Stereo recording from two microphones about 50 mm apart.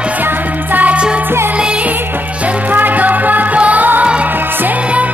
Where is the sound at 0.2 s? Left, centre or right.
Right.